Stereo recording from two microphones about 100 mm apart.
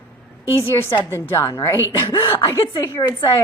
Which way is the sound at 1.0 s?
25° left (ahead or behind).